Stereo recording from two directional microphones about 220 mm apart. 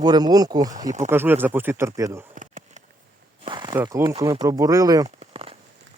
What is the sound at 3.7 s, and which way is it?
Speech, 10° right (ahead or behind).